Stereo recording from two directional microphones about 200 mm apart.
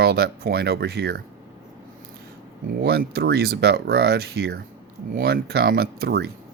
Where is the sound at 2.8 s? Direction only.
50° right (ahead or behind).